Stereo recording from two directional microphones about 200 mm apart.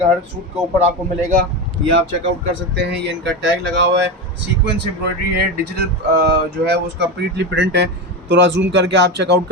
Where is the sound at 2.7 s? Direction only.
60° right (ahead or behind).